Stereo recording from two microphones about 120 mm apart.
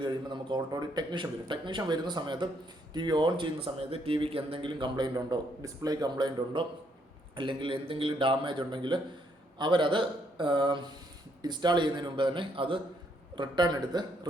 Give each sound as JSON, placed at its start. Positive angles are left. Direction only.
{"t": 0.0, "sound": "a man's voice", "side_deg": -40}